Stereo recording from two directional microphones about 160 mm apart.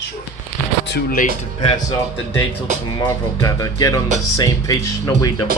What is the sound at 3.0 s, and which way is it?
Speech, 20° left (ahead or behind).